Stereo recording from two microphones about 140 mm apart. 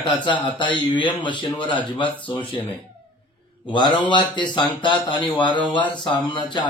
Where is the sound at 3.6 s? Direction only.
35° left (ahead or behind).